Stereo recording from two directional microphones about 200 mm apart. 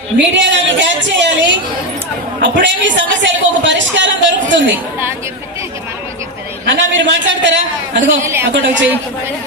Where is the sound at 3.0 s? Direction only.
65° right (ahead or behind).